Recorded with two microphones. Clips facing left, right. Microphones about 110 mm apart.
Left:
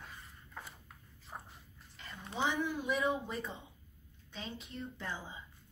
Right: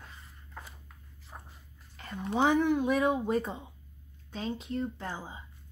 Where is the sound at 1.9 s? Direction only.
50° right (ahead or behind).